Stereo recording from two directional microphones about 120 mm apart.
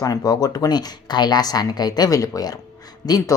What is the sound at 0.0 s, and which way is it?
Speech, 30° left (ahead or behind).